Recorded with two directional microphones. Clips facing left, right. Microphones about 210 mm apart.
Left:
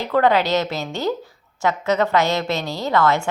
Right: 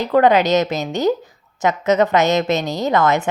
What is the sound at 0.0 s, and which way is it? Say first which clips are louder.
A woman's voice: right 4 dB; 20° right (ahead or behind).